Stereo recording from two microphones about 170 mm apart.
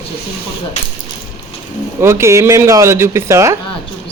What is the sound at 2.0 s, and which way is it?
Speech, 15° right (ahead or behind).